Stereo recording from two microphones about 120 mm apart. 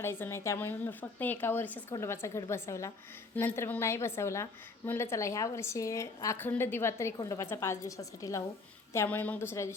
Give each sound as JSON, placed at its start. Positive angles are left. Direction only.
{"t": 0.0, "sound": "a woman's voice", "side_deg": 20}
{"t": 9.0, "sound": "a woman's voice", "side_deg": 10}